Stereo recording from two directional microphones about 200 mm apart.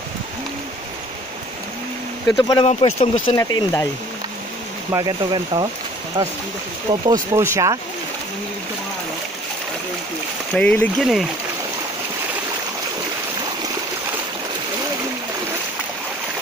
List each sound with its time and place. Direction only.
2.2 s speech: 15° left (ahead or behind)
2.6 s speech: 30° left (ahead or behind)
4.9 s speech: 20° right (ahead or behind)
10.5 s speech: 5° left (ahead or behind)